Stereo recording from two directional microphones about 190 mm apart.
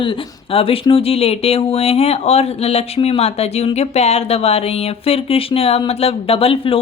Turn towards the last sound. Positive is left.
turn(degrees=30)  # may be behind; listen again after turning